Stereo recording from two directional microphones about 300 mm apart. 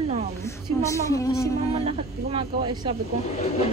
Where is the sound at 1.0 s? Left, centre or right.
Centre.